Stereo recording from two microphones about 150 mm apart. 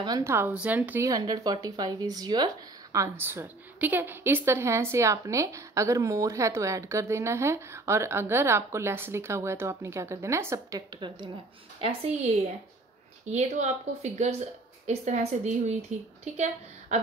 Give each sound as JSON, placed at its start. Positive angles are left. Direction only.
{"t": 0.0, "sound": "a woman's voice", "side_deg": -20}
{"t": 1.0, "sound": "speech", "side_deg": -25}
{"t": 11.0, "sound": "speech", "side_deg": -35}
{"t": 11.8, "sound": "speech", "side_deg": -45}
{"t": 13.3, "sound": "speech", "side_deg": -50}